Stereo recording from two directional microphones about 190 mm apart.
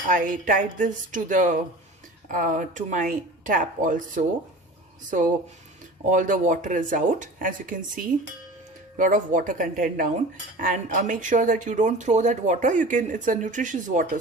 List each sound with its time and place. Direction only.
0.1 s speech: 45° right (ahead or behind)
6.1 s speech: 40° right (ahead or behind)